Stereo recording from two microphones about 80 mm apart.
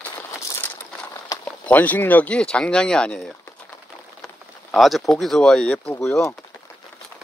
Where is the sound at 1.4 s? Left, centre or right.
Centre.